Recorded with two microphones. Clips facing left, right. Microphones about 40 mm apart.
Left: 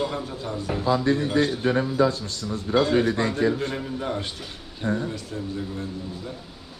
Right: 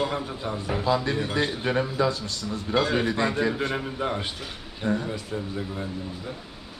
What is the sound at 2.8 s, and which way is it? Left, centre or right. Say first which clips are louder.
A man's voice: left 3 dB; right.